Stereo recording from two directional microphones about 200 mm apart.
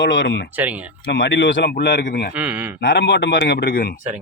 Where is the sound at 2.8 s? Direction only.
60° left (ahead or behind).